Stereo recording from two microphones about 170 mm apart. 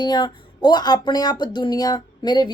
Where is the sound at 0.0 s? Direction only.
25° left (ahead or behind).